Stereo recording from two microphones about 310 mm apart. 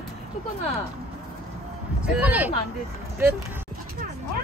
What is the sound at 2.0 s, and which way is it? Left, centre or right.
Speech, centre.